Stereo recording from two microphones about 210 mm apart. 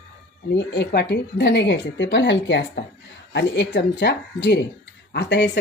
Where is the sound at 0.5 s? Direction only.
55° left (ahead or behind).